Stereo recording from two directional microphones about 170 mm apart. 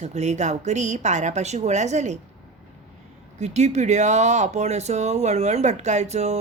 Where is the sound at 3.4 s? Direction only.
40° right (ahead or behind).